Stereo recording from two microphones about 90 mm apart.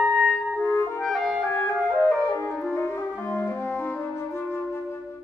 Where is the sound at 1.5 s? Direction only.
30° left (ahead or behind).